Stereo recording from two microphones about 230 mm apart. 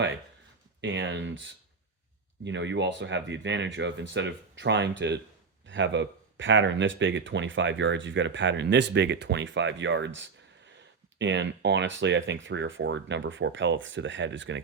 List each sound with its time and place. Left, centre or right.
0.8 s speech: right